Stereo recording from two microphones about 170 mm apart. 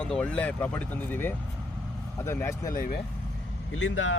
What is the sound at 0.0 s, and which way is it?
Speech, 5° left (ahead or behind).